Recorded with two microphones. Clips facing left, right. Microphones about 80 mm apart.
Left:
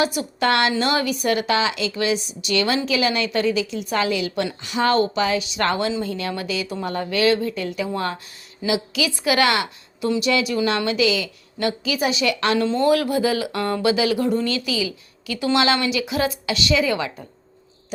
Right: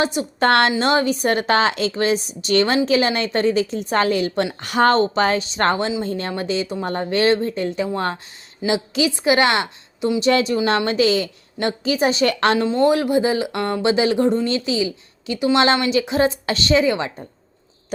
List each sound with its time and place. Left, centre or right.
0.0 s a woman's voice: right
0.4 s a woman's voice: right
4.9 s a woman's voice: right
12.5 s a woman's voice: centre